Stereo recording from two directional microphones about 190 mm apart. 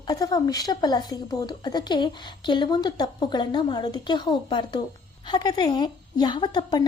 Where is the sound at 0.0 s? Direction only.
20° left (ahead or behind).